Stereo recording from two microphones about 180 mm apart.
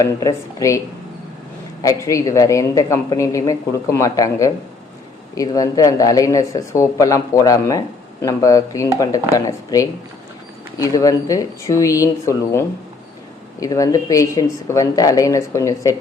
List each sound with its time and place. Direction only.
0.0 s a woman's voice: 20° left (ahead or behind)
1.8 s a woman's voice: 15° left (ahead or behind)